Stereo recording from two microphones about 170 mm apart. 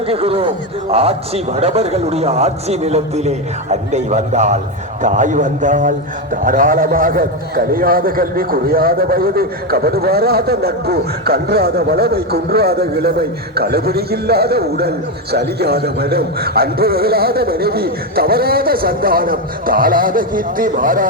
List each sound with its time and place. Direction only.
0.1 s a man's voice: 35° right (ahead or behind); by 21.1 s 55° right (ahead or behind)